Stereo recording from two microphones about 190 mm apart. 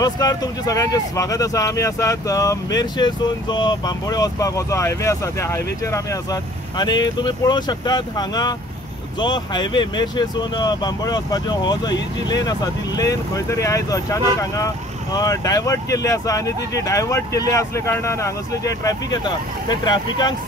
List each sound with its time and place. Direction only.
0.0 s speech: 20° left (ahead or behind)